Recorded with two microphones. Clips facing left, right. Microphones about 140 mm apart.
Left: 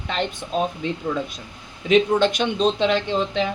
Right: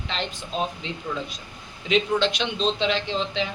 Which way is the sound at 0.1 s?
50° left (ahead or behind).